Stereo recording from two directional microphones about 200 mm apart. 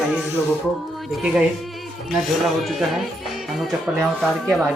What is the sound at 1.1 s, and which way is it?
Speech, 5° right (ahead or behind).